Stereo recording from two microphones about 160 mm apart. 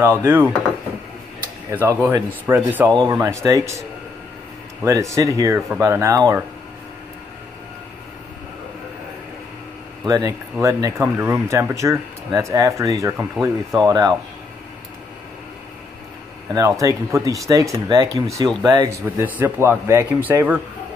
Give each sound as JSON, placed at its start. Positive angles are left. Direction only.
{"t": 0.0, "sound": "speech", "side_deg": -10}
{"t": 1.7, "sound": "speech", "side_deg": -10}
{"t": 4.8, "sound": "speech", "side_deg": -20}
{"t": 10.0, "sound": "speech", "side_deg": -20}
{"t": 16.5, "sound": "speech", "side_deg": -20}